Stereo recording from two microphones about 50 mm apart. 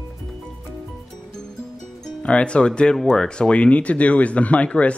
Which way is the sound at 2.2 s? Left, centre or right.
Left.